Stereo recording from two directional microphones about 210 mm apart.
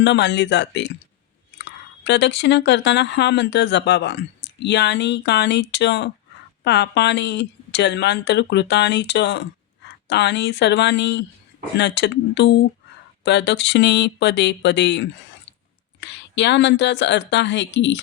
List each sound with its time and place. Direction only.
0.0 s speech: 55° left (ahead or behind)